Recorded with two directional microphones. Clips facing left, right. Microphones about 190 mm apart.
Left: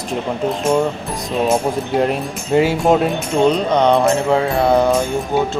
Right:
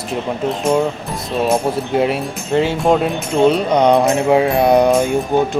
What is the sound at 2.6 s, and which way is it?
Music, 5° left (ahead or behind).